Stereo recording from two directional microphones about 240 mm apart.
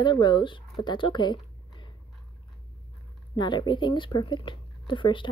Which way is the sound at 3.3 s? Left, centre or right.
Centre.